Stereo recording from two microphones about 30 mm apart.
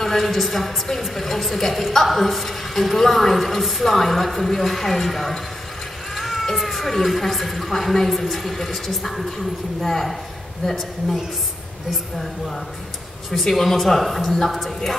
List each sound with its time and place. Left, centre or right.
0.0 s a woman's voice: centre
6.1 s a sound: centre
6.5 s a woman's voice: centre
12.2 s a woman's voice: centre